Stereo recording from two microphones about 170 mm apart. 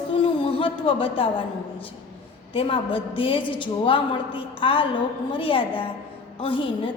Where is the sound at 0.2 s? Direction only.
35° left (ahead or behind).